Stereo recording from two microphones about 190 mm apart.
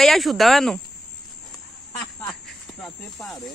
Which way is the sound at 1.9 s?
20° left (ahead or behind).